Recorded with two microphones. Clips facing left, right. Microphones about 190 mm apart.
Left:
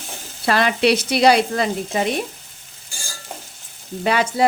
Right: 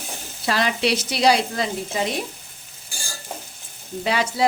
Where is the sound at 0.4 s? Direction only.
60° left (ahead or behind).